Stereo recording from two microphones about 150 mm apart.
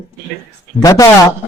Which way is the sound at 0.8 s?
25° left (ahead or behind).